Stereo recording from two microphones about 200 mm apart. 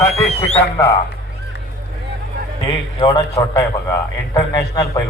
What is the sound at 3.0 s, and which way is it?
A man's voice, 15° left (ahead or behind).